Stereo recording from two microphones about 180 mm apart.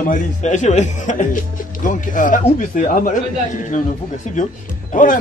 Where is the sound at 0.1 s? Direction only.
45° left (ahead or behind).